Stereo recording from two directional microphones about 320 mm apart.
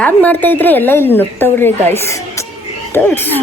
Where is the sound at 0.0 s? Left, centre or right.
Centre.